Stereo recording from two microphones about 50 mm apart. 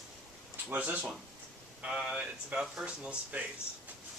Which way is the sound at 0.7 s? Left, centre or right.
Right.